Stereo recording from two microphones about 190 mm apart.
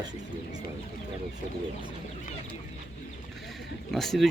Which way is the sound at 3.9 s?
Centre (ahead or behind).